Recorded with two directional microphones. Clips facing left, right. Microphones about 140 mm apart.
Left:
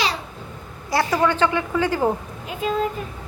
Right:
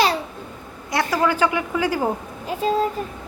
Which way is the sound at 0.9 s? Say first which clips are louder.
Left 1 dB; centre (ahead or behind).